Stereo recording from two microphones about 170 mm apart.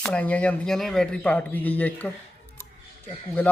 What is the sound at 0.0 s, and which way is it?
A man's voice, 10° left (ahead or behind).